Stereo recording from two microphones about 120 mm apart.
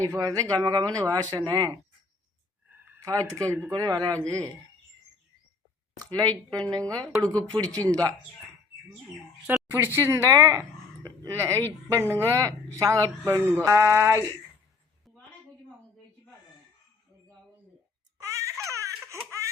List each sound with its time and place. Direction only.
0.0 s speech: 30° right (ahead or behind)
2.6 s a sound: 15° right (ahead or behind)
3.1 s speech: 30° right (ahead or behind)
6.3 s speech: 35° right (ahead or behind)
9.5 s a woman's voice: 20° right (ahead or behind)
18.2 s baby cry: 25° right (ahead or behind)
18.7 s laughter: 25° right (ahead or behind)